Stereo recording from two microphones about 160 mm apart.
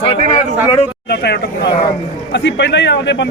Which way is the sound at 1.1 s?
90° left.